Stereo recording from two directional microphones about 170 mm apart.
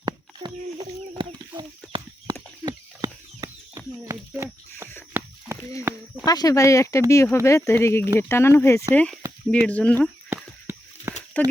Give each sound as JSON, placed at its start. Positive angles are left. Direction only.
{"t": 0.0, "sound": "speech", "side_deg": -25}
{"t": 2.6, "sound": "chicken", "side_deg": -20}
{"t": 5.2, "sound": "a sound", "side_deg": -10}
{"t": 5.9, "sound": "speech", "side_deg": -15}
{"t": 6.2, "sound": "speech", "side_deg": 25}
{"t": 10.2, "sound": "a sound", "side_deg": -15}
{"t": 11.3, "sound": "speech", "side_deg": 10}